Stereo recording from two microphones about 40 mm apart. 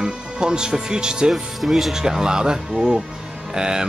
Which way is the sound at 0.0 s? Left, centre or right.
Centre.